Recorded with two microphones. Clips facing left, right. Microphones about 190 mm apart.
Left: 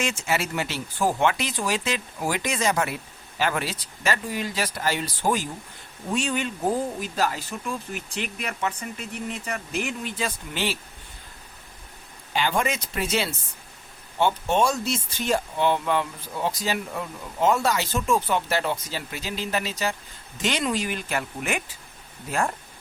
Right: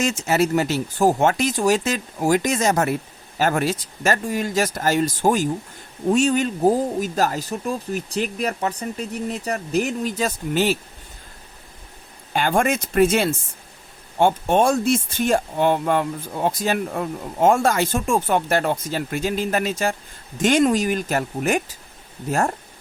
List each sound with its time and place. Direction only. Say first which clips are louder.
0.0 s speech: right 7 dB; 40° right (ahead or behind)
12.3 s speech: right 5 dB; 50° right (ahead or behind)